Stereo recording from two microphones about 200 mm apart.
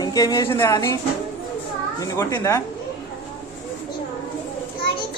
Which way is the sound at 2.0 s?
15° left (ahead or behind).